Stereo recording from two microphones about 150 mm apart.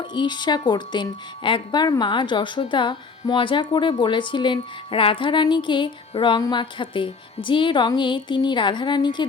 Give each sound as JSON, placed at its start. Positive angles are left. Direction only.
{"t": 0.0, "sound": "speech", "side_deg": 30}